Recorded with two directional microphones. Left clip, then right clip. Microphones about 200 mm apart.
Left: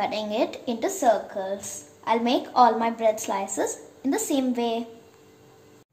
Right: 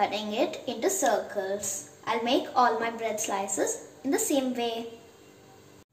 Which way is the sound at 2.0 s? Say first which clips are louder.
Left 3 dB; 55° left (ahead or behind).